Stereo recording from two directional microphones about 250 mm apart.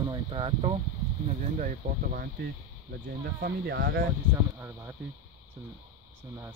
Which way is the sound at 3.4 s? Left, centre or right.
Right.